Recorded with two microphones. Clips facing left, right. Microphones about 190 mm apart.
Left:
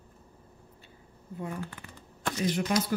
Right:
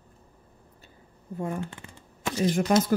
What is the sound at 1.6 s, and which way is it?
Speech, 25° right (ahead or behind).